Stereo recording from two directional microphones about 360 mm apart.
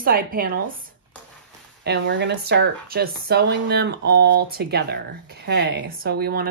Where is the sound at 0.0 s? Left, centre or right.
Right.